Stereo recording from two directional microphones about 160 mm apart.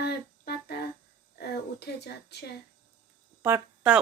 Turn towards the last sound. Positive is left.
turn(degrees=-10)  # may be behind; listen again after turning